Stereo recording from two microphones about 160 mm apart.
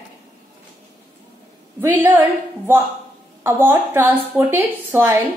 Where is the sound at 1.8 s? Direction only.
15° right (ahead or behind).